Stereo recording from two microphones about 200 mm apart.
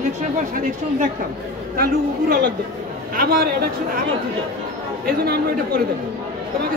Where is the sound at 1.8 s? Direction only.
45° right (ahead or behind).